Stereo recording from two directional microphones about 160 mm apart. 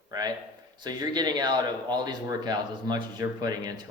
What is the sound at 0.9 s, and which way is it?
Speech, 25° right (ahead or behind).